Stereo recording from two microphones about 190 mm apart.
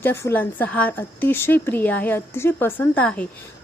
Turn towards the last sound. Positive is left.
turn(degrees=5)  # may be behind; listen again after turning